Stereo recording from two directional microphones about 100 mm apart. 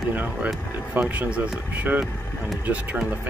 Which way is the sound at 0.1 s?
15° right (ahead or behind).